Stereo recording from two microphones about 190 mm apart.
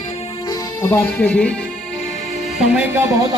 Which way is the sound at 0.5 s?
15° left (ahead or behind).